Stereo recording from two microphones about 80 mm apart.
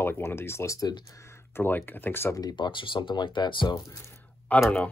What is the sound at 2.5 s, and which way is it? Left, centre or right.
Speech, left.